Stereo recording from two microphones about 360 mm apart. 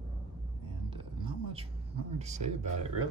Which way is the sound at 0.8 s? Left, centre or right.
Centre.